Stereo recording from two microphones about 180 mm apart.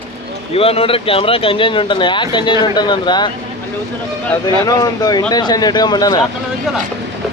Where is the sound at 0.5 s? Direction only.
35° left (ahead or behind).